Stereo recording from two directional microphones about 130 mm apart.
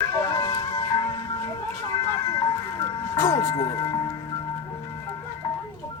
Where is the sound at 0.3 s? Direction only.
30° left (ahead or behind).